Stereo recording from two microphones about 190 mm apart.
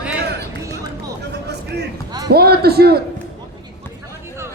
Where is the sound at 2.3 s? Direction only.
55° right (ahead or behind).